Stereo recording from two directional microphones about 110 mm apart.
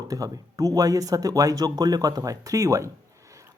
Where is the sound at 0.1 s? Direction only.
30° right (ahead or behind).